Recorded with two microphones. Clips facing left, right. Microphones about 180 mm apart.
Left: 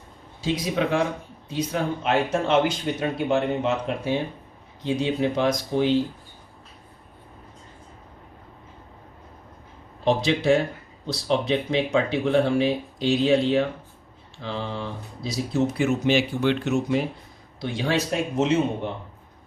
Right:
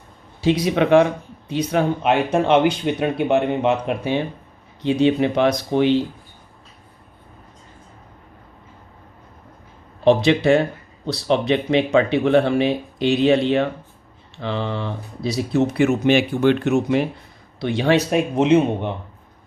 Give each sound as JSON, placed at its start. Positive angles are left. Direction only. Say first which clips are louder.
{"t": 0.4, "sound": "speech", "louder": "right 7 dB", "side_deg": -70}
{"t": 10.0, "sound": "speech", "louder": "right 7 dB", "side_deg": -65}